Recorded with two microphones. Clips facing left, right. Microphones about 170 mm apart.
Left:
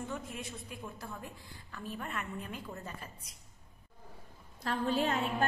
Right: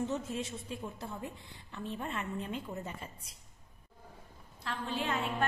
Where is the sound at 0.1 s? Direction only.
25° right (ahead or behind).